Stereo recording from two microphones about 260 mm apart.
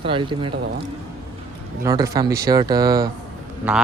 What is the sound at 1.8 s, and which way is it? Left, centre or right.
Speech, centre.